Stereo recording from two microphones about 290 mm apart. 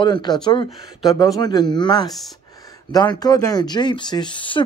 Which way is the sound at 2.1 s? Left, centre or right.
Centre.